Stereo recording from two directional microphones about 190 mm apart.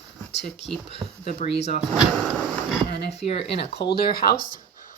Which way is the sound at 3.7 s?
60° left (ahead or behind).